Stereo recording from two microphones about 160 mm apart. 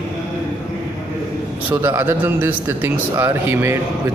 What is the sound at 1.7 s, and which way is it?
A man's voice, 15° right (ahead or behind).